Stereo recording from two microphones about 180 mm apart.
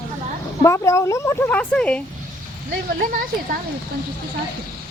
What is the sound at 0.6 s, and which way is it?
Speech, 15° left (ahead or behind).